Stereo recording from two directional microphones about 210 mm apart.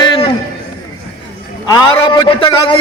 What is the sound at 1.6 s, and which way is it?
A man's voice, 20° left (ahead or behind).